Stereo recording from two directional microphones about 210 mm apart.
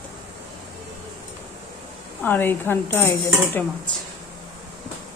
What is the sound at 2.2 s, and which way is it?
Speech, 10° left (ahead or behind).